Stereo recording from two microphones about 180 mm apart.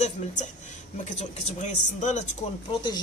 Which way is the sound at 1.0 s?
40° left (ahead or behind).